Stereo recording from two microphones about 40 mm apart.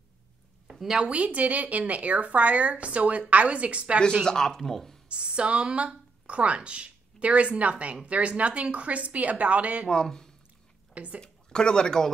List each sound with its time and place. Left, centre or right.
0.7 s a sound: centre
0.9 s speech: right
4.2 s speech: centre
5.0 s speech: right
10.0 s speech: centre